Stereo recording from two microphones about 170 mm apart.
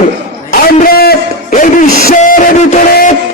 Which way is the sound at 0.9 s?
60° left (ahead or behind).